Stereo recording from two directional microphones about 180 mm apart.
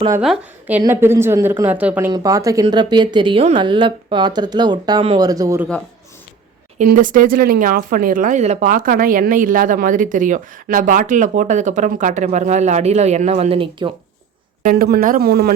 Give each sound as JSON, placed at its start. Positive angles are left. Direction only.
{"t": 0.2, "sound": "a woman's voice", "side_deg": -5}
{"t": 0.8, "sound": "a woman's voice", "side_deg": -15}
{"t": 6.7, "sound": "speech", "side_deg": -45}
{"t": 14.6, "sound": "speech", "side_deg": -55}